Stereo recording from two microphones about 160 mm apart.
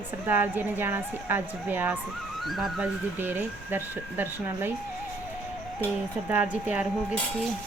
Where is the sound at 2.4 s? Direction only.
Centre (ahead or behind).